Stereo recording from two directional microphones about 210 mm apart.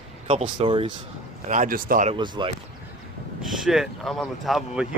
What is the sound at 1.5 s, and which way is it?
Speech, 40° right (ahead or behind).